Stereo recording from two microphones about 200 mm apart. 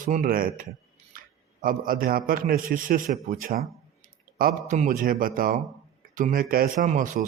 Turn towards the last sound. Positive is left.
turn(degrees=-40)  # may be behind; listen again after turning